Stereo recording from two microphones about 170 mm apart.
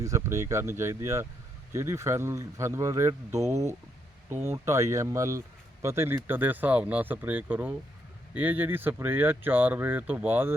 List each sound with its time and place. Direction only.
0.0 s speech: 15° right (ahead or behind)